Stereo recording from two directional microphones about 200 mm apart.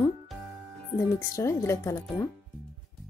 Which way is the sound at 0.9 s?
15° left (ahead or behind).